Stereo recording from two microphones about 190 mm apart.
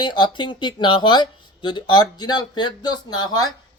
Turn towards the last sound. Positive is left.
turn(degrees=20)  # may be behind; listen again after turning